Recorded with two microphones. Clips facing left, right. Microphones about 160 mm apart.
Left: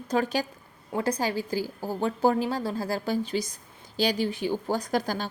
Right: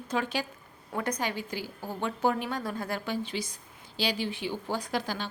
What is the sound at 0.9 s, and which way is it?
A woman's voice, 30° left (ahead or behind).